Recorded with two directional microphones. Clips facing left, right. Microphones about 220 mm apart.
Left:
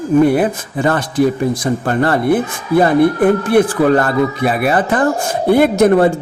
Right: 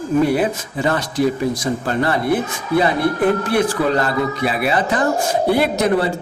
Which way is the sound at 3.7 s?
50° left (ahead or behind).